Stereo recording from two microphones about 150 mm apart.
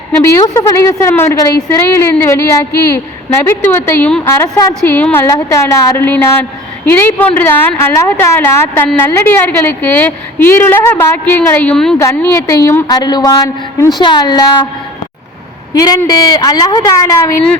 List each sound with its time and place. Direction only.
0.2 s a woman's voice: 20° left (ahead or behind); by 11.9 s 5° left (ahead or behind)
11.9 s a woman's voice: 20° left (ahead or behind)
16.0 s a woman's voice: 25° left (ahead or behind)